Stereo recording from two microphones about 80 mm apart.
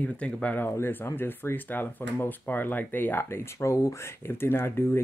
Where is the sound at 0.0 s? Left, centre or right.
Centre.